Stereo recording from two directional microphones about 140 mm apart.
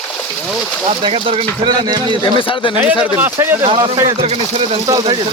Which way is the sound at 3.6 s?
40° right (ahead or behind).